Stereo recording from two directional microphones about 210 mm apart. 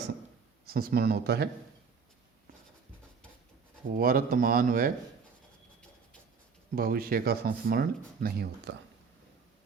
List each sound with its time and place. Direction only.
0.7 s speech: 45° right (ahead or behind)
3.9 s speech: 45° right (ahead or behind)
6.7 s speech: 45° right (ahead or behind)